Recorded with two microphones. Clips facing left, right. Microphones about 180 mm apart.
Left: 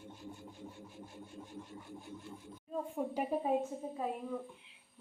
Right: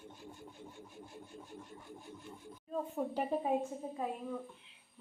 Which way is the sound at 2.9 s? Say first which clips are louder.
Even; 10° left (ahead or behind).